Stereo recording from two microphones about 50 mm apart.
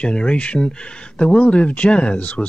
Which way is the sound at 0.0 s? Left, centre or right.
Centre.